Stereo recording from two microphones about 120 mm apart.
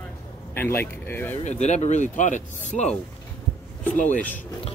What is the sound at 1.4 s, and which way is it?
Speech, 70° left (ahead or behind).